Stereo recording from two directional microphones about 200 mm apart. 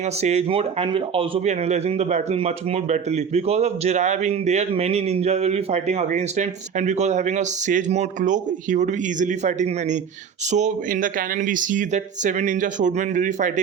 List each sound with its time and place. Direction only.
0.2 s speech: 30° right (ahead or behind)